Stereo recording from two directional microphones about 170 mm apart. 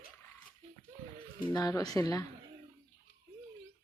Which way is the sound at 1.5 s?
25° left (ahead or behind).